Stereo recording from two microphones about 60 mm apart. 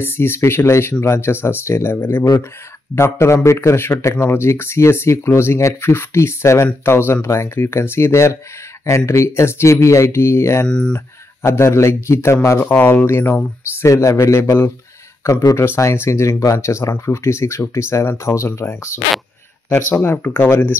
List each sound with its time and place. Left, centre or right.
0.0 s speech: left
3.0 s speech: left
6.8 s speech: left
10.7 s speech: centre
11.4 s speech: left
12.5 s speech: left
13.2 s speech: left
13.8 s speech: left
19.7 s speech: left